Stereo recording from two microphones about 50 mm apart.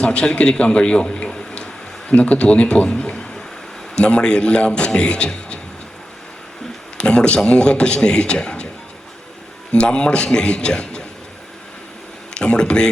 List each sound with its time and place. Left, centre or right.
0.0 s a man's voice: left
6.9 s a man's voice: centre
9.7 s a man's voice: centre
12.3 s speech: centre